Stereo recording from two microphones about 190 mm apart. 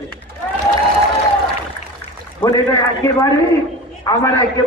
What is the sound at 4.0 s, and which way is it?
Speech, 20° left (ahead or behind).